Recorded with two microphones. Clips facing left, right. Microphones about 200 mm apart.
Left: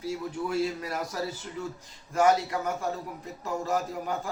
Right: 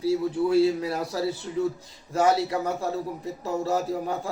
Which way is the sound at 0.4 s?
30° right (ahead or behind).